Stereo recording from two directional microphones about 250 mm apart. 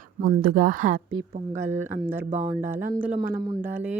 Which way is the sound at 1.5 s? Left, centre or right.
Centre.